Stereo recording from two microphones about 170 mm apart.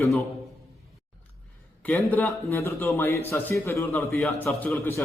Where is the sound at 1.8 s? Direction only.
10° left (ahead or behind).